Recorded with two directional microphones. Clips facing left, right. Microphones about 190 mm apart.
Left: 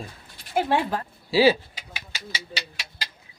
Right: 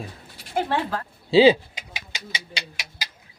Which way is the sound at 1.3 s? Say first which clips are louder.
Right 4 dB; 20° right (ahead or behind).